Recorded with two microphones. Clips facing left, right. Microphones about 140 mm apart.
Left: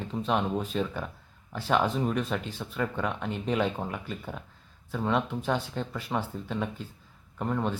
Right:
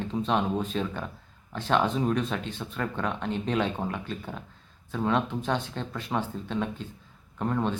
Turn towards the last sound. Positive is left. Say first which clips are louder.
# right 2 dB
turn(degrees=0)  # may be behind; listen again after turning